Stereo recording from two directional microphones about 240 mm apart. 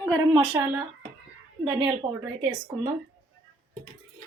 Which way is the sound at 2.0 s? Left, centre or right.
Right.